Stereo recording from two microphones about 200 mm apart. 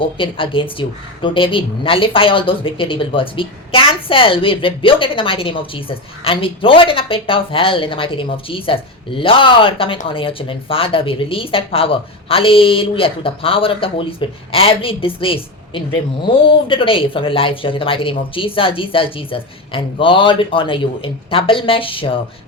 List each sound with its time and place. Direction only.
0.0 s speech: 25° left (ahead or behind)